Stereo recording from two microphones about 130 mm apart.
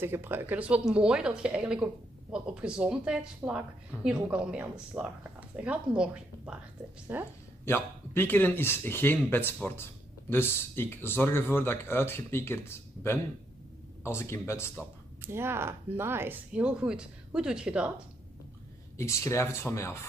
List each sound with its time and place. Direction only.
0.0 s speech: 15° right (ahead or behind)
7.6 s speech: 15° left (ahead or behind)
14.8 s speech: 15° right (ahead or behind)
18.9 s speech: 20° left (ahead or behind)